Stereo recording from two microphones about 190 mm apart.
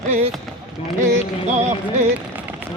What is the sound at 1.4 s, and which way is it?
Music, 40° right (ahead or behind).